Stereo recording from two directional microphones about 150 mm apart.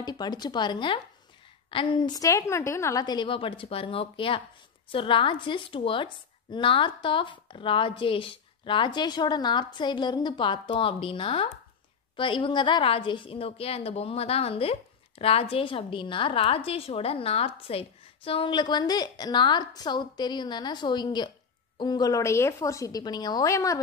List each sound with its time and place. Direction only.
0.0 s a woman's voice: 30° left (ahead or behind)